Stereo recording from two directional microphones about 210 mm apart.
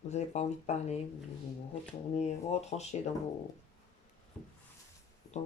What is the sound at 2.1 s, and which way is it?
Speech, 30° left (ahead or behind).